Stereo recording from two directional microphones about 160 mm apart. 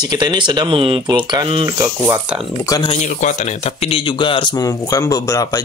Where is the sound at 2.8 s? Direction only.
40° left (ahead or behind).